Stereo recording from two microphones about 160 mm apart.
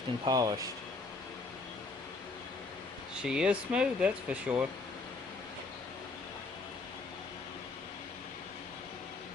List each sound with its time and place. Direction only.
0.3 s speech: 25° right (ahead or behind)
3.2 s speech: 5° right (ahead or behind)